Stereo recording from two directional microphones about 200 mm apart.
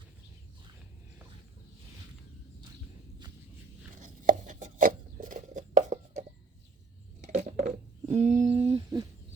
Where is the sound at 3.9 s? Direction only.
40° right (ahead or behind).